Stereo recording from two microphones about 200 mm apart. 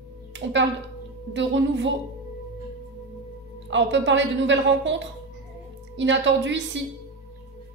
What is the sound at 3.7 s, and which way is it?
A woman's voice, 65° right (ahead or behind).